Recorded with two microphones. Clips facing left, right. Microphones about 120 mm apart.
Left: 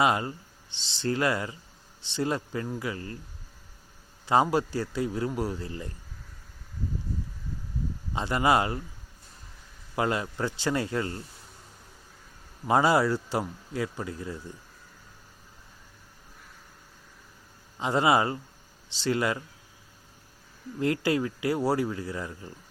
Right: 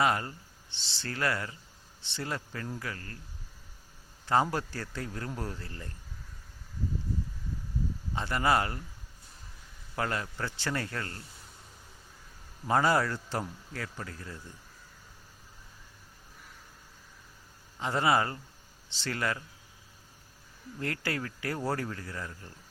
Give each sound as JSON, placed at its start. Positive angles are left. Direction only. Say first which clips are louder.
{"t": 0.0, "sound": "speech", "louder": "left 3 dB", "side_deg": 20}
{"t": 4.3, "sound": "speech", "louder": "left 4 dB", "side_deg": 15}
{"t": 8.1, "sound": "speech", "louder": "left 4 dB", "side_deg": 20}
{"t": 9.9, "sound": "speech", "louder": "left 5 dB", "side_deg": 20}
{"t": 12.6, "sound": "speech", "louder": "left 4 dB", "side_deg": 15}
{"t": 17.7, "sound": "speech", "louder": "left 4 dB", "side_deg": 20}
{"t": 20.7, "sound": "speech", "louder": "left 9 dB", "side_deg": 20}